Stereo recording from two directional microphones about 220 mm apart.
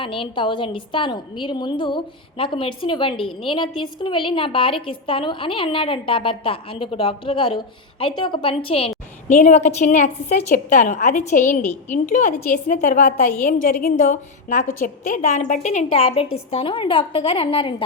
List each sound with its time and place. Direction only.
0.0 s a woman's voice: 25° left (ahead or behind)